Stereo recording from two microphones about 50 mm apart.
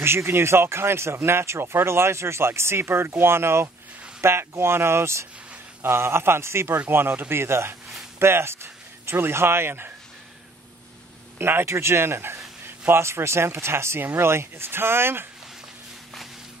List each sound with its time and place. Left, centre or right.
0.0 s speech: right
6.9 s speech: right
11.3 s speech: right